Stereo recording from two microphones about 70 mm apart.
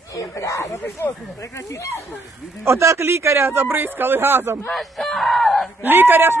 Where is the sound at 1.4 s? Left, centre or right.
Left.